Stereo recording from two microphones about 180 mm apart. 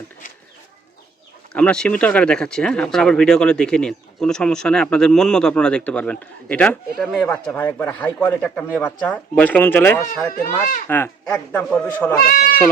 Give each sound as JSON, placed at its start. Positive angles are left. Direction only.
{"t": 1.5, "sound": "speech", "side_deg": 5}
{"t": 12.2, "sound": "speech", "side_deg": 50}